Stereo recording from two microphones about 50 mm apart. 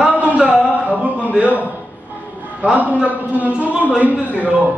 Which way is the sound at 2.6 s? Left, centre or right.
Right.